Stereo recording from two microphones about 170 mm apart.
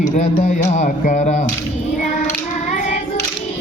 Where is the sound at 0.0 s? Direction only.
45° left (ahead or behind).